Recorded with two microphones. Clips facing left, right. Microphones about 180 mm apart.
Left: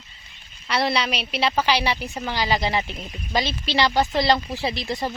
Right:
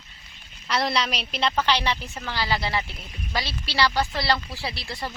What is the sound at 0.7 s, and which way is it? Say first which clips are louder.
A woman's voice: left 2 dB; centre (ahead or behind).